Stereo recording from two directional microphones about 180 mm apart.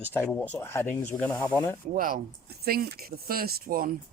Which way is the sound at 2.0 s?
50° right (ahead or behind).